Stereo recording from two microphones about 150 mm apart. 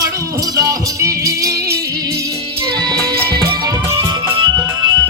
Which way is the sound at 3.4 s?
20° right (ahead or behind).